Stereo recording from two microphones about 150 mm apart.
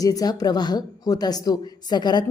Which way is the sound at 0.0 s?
25° left (ahead or behind).